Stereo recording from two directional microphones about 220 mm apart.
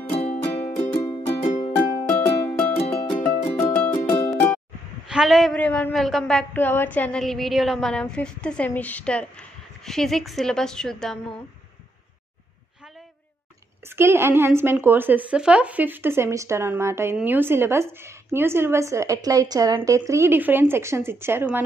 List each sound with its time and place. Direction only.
0.1 s music: 30° left (ahead or behind)
2.0 s music: 10° left (ahead or behind)
5.1 s a woman's voice: centre (ahead or behind)
13.8 s a woman's voice: 10° right (ahead or behind)